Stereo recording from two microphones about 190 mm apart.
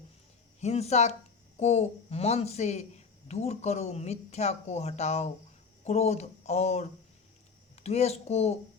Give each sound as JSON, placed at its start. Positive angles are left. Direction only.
{"t": 0.6, "sound": "speech", "side_deg": 35}
{"t": 7.9, "sound": "speech", "side_deg": 35}